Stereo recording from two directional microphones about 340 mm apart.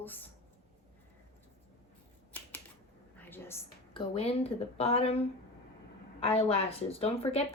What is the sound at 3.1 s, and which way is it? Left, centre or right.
Speech, centre.